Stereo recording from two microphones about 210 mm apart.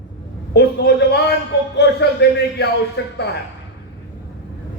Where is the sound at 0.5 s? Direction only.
50° left (ahead or behind).